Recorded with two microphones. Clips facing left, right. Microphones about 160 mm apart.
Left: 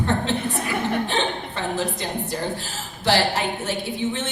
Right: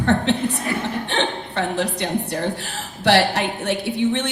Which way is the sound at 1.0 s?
70° right (ahead or behind).